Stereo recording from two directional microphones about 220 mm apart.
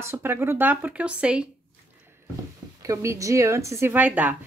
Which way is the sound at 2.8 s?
15° right (ahead or behind).